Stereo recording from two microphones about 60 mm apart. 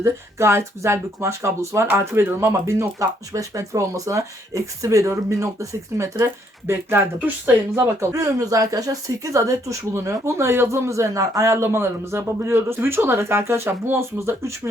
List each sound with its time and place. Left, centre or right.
0.0 s speech: right
8.1 s speech: right
14.2 s speech: right